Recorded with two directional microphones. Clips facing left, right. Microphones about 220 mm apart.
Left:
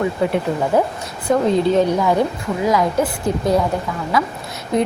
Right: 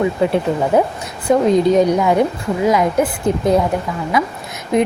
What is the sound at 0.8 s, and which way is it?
A woman's voice, 20° right (ahead or behind).